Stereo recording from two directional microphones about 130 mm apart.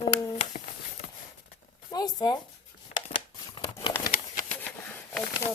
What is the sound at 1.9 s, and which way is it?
Speech, 30° left (ahead or behind).